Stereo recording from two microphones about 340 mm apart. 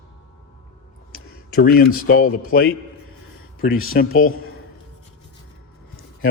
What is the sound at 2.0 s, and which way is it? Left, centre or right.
Speech, left.